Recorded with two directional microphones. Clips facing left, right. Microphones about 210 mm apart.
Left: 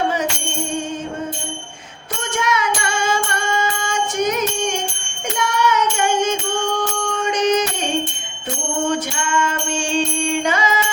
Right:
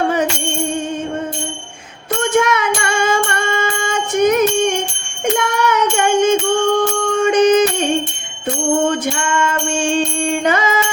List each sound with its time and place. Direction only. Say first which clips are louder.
2.3 s music: right 4 dB; 55° right (ahead or behind)
5.2 s child singing: right 4 dB; 55° right (ahead or behind)
7.3 s music: right 7 dB; 55° right (ahead or behind)
10.4 s music: right 6 dB; 55° right (ahead or behind)